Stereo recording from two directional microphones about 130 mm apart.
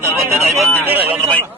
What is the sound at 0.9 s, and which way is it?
Speech, 15° right (ahead or behind).